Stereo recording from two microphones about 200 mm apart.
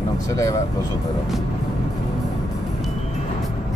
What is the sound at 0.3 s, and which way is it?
Speech, 15° left (ahead or behind).